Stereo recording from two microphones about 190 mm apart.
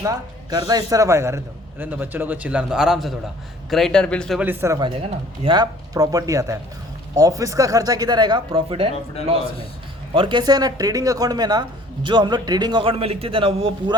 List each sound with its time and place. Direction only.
0.0 s a woman's voice: 20° right (ahead or behind); by 4.4 s 5° left (ahead or behind)
4.4 s a woman's voice: 10° right (ahead or behind)
4.9 s a man's voice: 25° right (ahead or behind)
10.2 s a man's voice: 25° right (ahead or behind)